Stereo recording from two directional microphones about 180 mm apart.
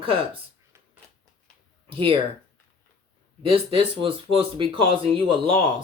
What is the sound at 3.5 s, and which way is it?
Speech, 30° right (ahead or behind).